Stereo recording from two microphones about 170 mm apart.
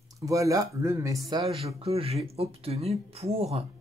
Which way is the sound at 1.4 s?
35° right (ahead or behind).